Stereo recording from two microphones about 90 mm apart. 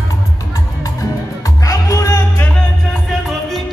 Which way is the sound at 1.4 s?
40° left (ahead or behind).